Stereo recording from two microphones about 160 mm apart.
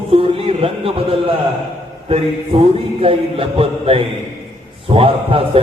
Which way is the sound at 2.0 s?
35° right (ahead or behind).